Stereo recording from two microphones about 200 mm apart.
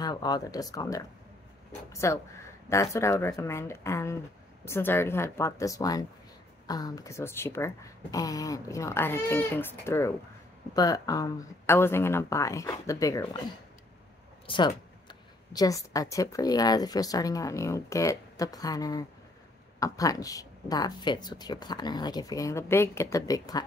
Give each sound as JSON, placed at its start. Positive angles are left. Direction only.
{"t": 0.0, "sound": "speech", "side_deg": 20}
{"t": 14.4, "sound": "a sound", "side_deg": 25}
{"t": 15.0, "sound": "speech", "side_deg": 20}